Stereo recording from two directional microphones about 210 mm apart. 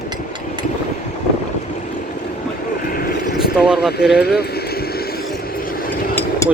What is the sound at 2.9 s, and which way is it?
Vehicle, 45° left (ahead or behind).